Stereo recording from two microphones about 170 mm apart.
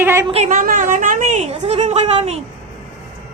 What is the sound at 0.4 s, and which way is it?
A woman's voice, 50° right (ahead or behind).